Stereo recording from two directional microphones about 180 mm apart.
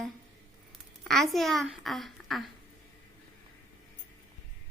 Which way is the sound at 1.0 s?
Centre (ahead or behind).